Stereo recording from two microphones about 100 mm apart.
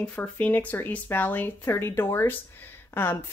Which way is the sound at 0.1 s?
15° left (ahead or behind).